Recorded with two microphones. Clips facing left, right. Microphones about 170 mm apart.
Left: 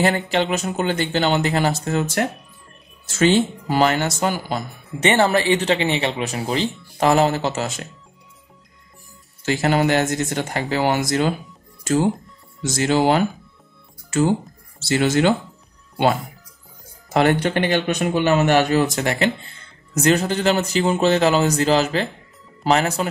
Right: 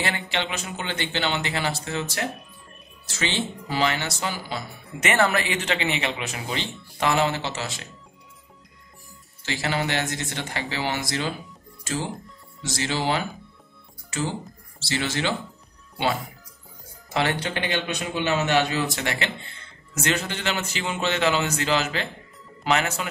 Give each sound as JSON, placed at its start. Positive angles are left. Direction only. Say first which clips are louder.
{"t": 0.0, "sound": "speech", "louder": "left 9 dB", "side_deg": 40}
{"t": 5.0, "sound": "speech", "louder": "left 6 dB", "side_deg": 30}
{"t": 9.4, "sound": "speech", "louder": "left 8 dB", "side_deg": 45}
{"t": 14.8, "sound": "speech", "louder": "left 9 dB", "side_deg": 45}
{"t": 17.1, "sound": "speech", "louder": "left 8 dB", "side_deg": 45}